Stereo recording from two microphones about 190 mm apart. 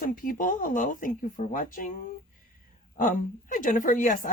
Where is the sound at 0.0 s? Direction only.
50° left (ahead or behind).